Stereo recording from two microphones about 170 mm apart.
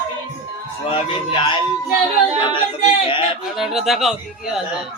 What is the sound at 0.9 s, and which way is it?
Speech, 30° left (ahead or behind).